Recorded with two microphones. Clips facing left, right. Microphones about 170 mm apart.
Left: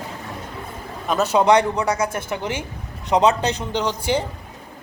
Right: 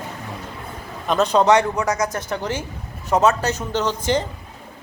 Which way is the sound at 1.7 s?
30° left (ahead or behind).